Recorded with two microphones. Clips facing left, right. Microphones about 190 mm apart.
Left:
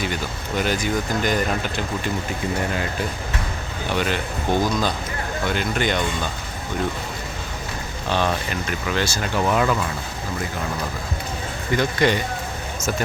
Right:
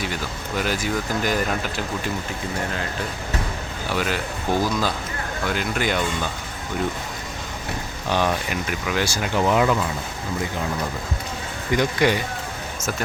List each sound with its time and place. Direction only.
0.0 s speech: centre (ahead or behind)
3.9 s speech: centre (ahead or behind)
8.1 s speech: 10° right (ahead or behind)
11.7 s speech: 15° right (ahead or behind)